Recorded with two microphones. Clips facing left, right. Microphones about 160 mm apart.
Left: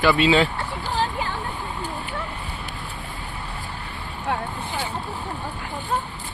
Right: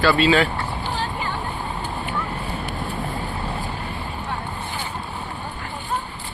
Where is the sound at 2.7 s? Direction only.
45° right (ahead or behind).